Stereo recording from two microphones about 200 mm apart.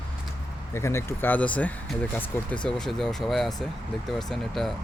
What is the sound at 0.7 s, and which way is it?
Speech, 15° left (ahead or behind).